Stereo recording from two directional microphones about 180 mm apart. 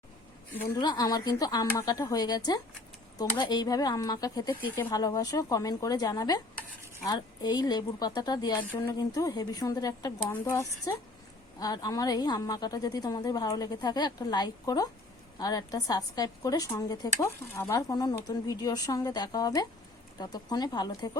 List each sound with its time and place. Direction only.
0.8 s a woman's voice: 20° left (ahead or behind)